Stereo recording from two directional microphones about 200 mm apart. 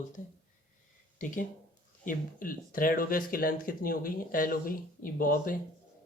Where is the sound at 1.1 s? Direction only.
40° left (ahead or behind).